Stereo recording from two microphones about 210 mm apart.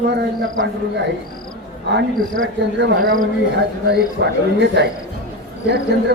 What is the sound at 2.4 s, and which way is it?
A man's voice, 55° right (ahead or behind).